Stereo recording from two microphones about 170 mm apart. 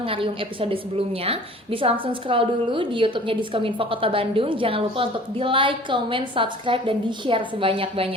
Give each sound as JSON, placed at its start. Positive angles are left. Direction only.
{"t": 0.0, "sound": "a woman's voice", "side_deg": -30}